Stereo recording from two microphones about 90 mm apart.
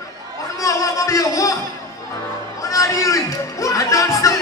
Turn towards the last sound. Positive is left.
turn(degrees=35)  # may be behind; listen again after turning